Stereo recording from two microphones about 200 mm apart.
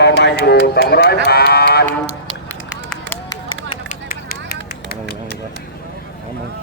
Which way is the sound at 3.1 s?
10° left (ahead or behind).